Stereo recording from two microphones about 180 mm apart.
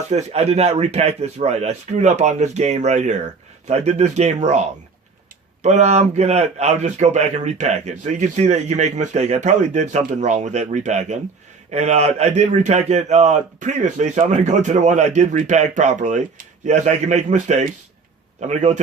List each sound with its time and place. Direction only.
0.1 s a man's voice: 40° right (ahead or behind)
5.6 s a man's voice: 40° right (ahead or behind)